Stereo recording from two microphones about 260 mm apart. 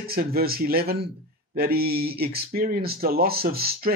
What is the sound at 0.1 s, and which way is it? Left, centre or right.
Speech, right.